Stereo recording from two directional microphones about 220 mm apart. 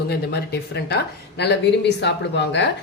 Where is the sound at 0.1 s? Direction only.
50° left (ahead or behind).